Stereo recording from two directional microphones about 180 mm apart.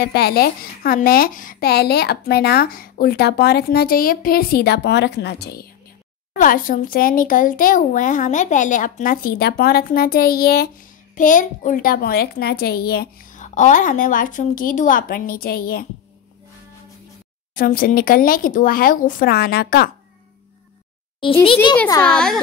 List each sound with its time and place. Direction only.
0.0 s a woman's voice: 65° left (ahead or behind)
6.3 s speech: 50° left (ahead or behind)
17.6 s speech: 55° left (ahead or behind)
22.0 s speech: 5° left (ahead or behind)